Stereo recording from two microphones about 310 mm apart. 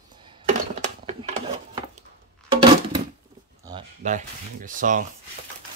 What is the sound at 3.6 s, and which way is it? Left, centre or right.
Speech, centre.